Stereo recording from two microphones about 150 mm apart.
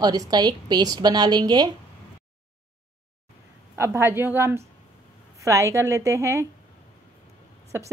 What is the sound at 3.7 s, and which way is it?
A woman's voice, 15° right (ahead or behind).